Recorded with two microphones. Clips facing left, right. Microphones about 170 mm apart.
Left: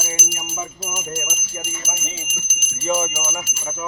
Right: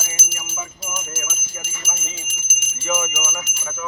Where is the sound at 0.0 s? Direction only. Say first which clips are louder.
Left 6 dB; 25° left (ahead or behind).